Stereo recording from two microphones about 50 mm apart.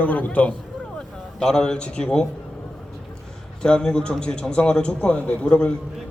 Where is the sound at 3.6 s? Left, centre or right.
Centre.